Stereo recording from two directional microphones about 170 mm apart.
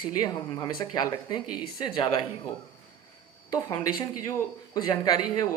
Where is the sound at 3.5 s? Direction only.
20° left (ahead or behind).